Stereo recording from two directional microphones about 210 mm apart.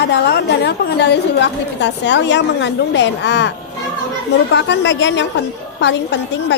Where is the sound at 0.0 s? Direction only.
55° left (ahead or behind).